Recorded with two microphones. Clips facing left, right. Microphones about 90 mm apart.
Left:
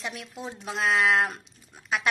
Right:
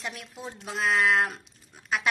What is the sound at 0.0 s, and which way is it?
A woman's voice, centre (ahead or behind).